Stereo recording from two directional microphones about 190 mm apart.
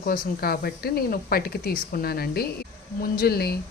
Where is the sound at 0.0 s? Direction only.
50° left (ahead or behind).